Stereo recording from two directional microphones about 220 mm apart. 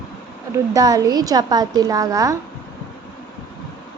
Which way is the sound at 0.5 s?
15° right (ahead or behind).